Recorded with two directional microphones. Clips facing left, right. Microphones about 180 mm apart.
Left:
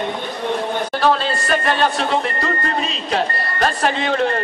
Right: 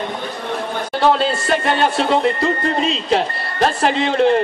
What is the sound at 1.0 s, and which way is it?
Speech, 25° right (ahead or behind).